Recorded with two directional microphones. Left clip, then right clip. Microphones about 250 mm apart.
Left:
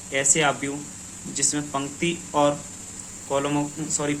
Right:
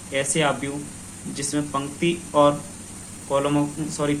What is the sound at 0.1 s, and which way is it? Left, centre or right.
Speech, left.